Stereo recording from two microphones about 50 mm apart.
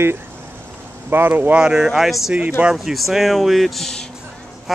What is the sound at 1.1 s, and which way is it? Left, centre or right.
Speech, right.